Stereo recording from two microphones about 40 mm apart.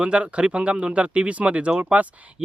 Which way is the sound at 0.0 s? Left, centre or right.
Right.